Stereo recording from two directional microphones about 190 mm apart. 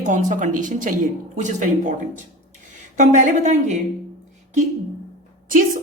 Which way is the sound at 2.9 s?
40° right (ahead or behind).